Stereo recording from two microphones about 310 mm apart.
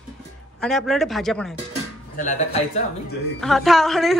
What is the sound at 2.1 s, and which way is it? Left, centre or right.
Speech, left.